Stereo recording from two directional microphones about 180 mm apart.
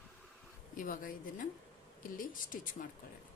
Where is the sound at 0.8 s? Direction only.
50° left (ahead or behind).